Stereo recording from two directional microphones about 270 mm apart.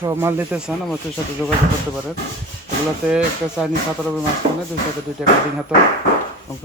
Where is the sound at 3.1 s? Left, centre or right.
Centre.